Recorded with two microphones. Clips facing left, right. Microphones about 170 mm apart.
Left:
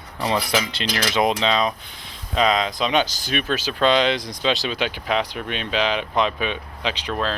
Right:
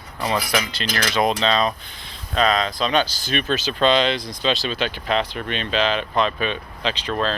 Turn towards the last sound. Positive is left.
turn(degrees=10)  # may be behind; listen again after turning